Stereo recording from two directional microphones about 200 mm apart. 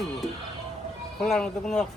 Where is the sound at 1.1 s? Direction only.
Centre (ahead or behind).